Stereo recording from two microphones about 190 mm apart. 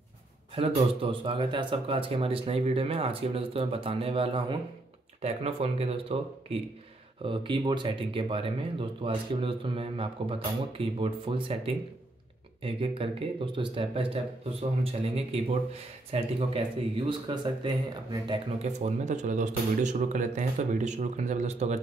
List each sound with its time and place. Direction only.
0.6 s speech: 30° right (ahead or behind)